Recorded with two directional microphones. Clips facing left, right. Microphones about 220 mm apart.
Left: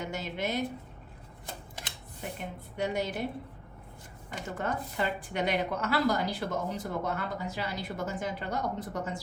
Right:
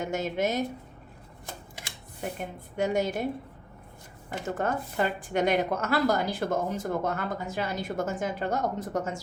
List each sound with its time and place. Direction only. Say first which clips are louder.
0.0 s a woman's voice: right 6 dB; 45° right (ahead or behind)
2.7 s a woman's voice: right 5 dB; 45° right (ahead or behind)
4.3 s a woman's voice: right 5 dB; 45° right (ahead or behind)